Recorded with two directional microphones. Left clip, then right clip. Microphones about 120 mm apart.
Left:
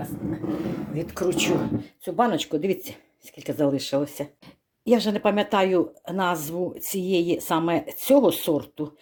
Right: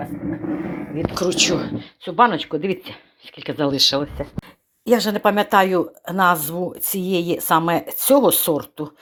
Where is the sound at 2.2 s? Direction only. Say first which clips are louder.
Right 6 dB; 10° left (ahead or behind).